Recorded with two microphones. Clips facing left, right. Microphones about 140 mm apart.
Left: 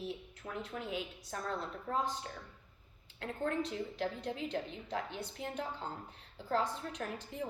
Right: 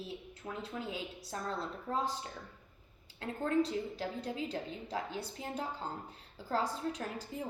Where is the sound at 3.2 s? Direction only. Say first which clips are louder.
Right 4 dB; 35° right (ahead or behind).